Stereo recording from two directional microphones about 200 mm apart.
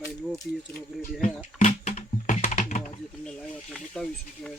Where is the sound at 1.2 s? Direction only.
35° left (ahead or behind).